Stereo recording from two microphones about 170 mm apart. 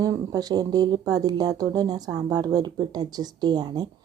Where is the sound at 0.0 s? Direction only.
20° right (ahead or behind).